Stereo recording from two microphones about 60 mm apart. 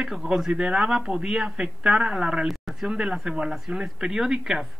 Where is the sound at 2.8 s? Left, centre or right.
Centre.